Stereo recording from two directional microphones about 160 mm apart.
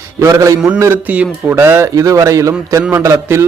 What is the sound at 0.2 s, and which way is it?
A man's voice, 20° right (ahead or behind).